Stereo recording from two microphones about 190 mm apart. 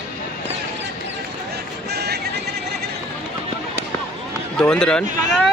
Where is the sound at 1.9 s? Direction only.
60° right (ahead or behind).